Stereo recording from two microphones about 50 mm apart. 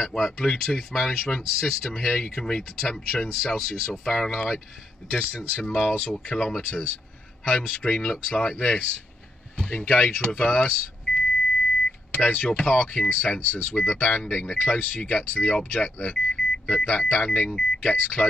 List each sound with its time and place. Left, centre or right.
0.0 s speech: centre
16.7 s speech: left
17.0 s speech: centre